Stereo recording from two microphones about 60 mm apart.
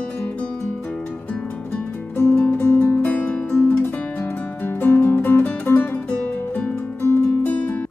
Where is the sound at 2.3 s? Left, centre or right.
Left.